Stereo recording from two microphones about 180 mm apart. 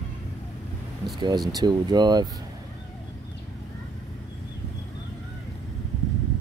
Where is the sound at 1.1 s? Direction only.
25° right (ahead or behind).